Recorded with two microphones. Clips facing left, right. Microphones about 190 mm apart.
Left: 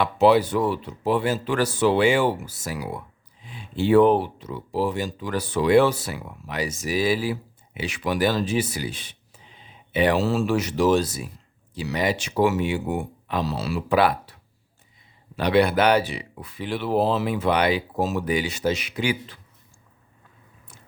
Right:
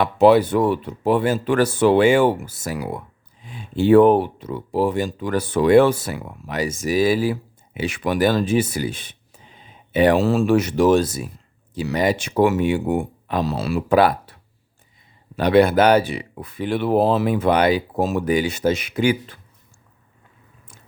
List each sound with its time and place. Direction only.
0.0 s speech: 50° right (ahead or behind)
15.4 s speech: 45° right (ahead or behind)